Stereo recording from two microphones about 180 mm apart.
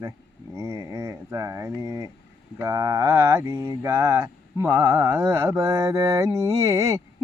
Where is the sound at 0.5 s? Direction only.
15° right (ahead or behind).